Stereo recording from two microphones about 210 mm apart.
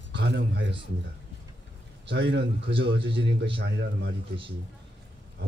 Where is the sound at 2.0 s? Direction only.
55° right (ahead or behind).